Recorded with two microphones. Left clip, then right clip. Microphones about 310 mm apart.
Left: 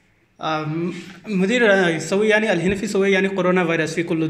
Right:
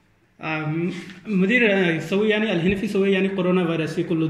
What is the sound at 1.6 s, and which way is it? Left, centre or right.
Speech, centre.